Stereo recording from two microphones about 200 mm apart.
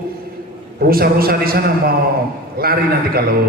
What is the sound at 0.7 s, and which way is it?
A man's voice, 50° right (ahead or behind).